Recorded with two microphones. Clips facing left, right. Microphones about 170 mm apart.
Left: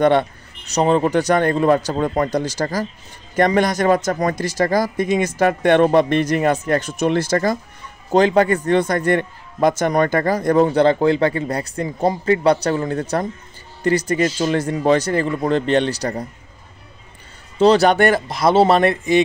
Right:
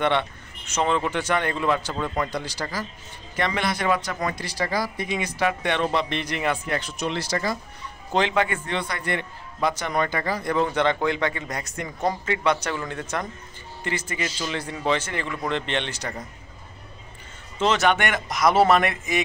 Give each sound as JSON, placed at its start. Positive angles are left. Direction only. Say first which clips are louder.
{"t": 0.0, "sound": "a man's voice", "louder": "left 8 dB", "side_deg": 40}
{"t": 17.6, "sound": "a man's voice", "louder": "left 8 dB", "side_deg": 35}